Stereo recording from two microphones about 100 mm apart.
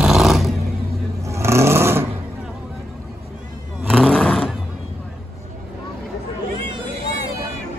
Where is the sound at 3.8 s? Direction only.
5° left (ahead or behind).